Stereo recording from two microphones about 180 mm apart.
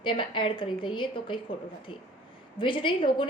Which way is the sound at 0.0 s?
25° left (ahead or behind).